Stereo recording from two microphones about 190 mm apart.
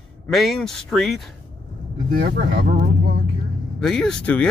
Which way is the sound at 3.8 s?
5° left (ahead or behind).